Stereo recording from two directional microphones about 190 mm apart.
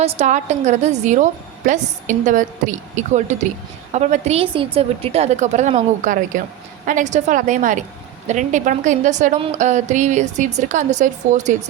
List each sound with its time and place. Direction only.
0.0 s a woman's voice: 35° right (ahead or behind)